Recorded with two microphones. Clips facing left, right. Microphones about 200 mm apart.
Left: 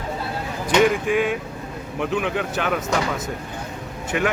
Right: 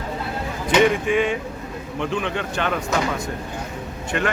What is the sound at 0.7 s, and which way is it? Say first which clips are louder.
Speech: even; centre (ahead or behind).